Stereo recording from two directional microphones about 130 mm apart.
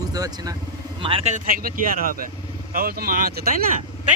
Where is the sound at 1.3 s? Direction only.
90° right.